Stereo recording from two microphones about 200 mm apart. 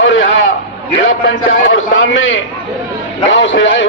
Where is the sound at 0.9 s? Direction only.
75° left (ahead or behind).